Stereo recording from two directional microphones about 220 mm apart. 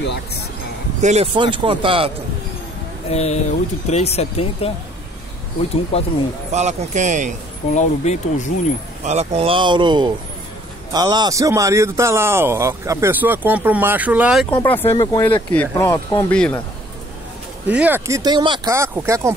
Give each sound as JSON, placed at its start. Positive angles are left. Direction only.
{"t": 1.0, "sound": "speech", "side_deg": -30}
{"t": 3.1, "sound": "speech", "side_deg": 30}
{"t": 5.9, "sound": "speech", "side_deg": 25}
{"t": 6.5, "sound": "speech", "side_deg": -30}
{"t": 7.7, "sound": "speech", "side_deg": 30}
{"t": 9.0, "sound": "speech", "side_deg": -30}
{"t": 14.6, "sound": "speech", "side_deg": 10}
{"t": 15.9, "sound": "speech", "side_deg": 20}
{"t": 16.3, "sound": "speech", "side_deg": 5}
{"t": 17.6, "sound": "speech", "side_deg": -5}